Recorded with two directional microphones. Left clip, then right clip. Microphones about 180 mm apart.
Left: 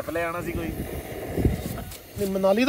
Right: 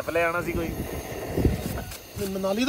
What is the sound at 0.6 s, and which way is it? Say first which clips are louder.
Vehicle: right 1 dB; centre (ahead or behind).